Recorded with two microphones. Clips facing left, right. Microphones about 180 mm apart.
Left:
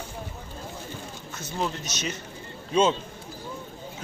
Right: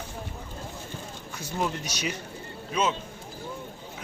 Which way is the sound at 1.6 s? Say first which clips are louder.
Even; 10° right (ahead or behind).